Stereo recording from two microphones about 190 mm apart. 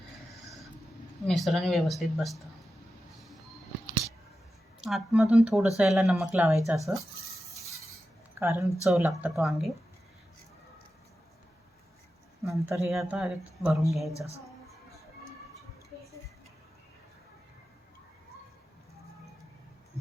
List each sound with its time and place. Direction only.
1.3 s speech: centre (ahead or behind)
4.8 s speech: centre (ahead or behind)
6.7 s speech: 15° right (ahead or behind)
8.4 s speech: 10° right (ahead or behind)
12.5 s speech: 15° right (ahead or behind)
12.9 s speech: centre (ahead or behind)